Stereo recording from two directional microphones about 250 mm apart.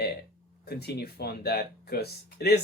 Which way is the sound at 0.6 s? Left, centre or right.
Left.